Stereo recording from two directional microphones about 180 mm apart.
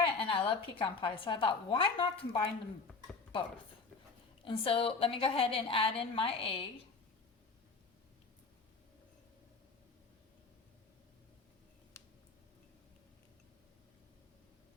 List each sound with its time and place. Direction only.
0.0 s a woman's voice: 30° left (ahead or behind)
4.4 s a woman's voice: 30° left (ahead or behind)